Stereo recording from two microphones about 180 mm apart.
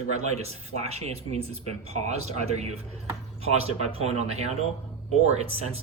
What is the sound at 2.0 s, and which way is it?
Speech, 40° right (ahead or behind).